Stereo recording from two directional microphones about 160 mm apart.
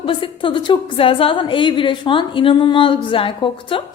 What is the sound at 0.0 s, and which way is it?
A woman's voice, 30° left (ahead or behind).